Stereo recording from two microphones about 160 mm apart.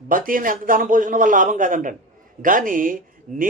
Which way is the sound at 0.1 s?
60° right (ahead or behind).